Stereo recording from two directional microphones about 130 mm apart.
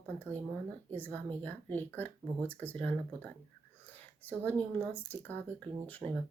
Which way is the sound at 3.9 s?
15° left (ahead or behind).